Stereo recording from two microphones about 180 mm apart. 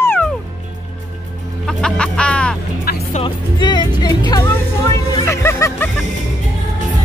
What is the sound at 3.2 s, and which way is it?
Music, 25° left (ahead or behind).